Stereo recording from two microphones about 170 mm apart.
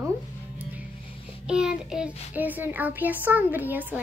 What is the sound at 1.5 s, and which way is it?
Child singing, 5° right (ahead or behind).